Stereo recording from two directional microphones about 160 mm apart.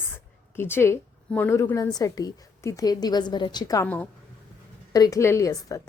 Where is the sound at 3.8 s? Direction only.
10° left (ahead or behind).